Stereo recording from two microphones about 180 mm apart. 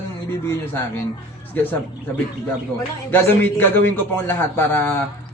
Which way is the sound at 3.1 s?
10° left (ahead or behind).